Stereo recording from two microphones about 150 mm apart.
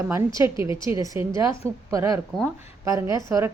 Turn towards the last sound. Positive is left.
turn(degrees=-20)  # may be behind; listen again after turning